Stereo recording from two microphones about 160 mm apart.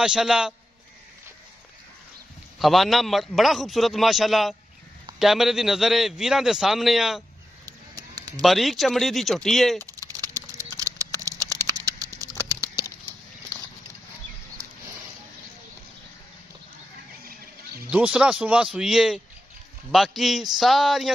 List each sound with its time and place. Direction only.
0.0 s a man's voice: 5° right (ahead or behind)
2.6 s a man's voice: centre (ahead or behind)
7.6 s a sound: 25° right (ahead or behind)
8.3 s a man's voice: centre (ahead or behind)
9.8 s a sound: 20° right (ahead or behind)
17.8 s a man's voice: 5° right (ahead or behind)